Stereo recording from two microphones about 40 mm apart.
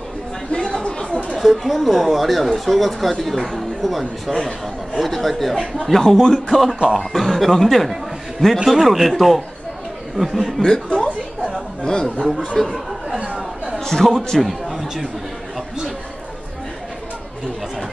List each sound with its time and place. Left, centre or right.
0.5 s chatter: centre
1.4 s speech: centre
8.6 s speech: centre
10.1 s speech: centre
10.6 s speech: centre
12.6 s speech: centre
13.7 s speech: centre
14.4 s a sound: centre